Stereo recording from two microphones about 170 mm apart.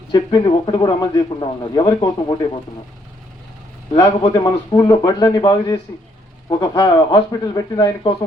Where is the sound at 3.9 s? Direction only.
20° left (ahead or behind).